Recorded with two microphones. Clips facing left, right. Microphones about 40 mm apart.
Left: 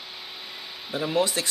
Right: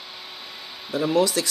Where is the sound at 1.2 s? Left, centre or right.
Left.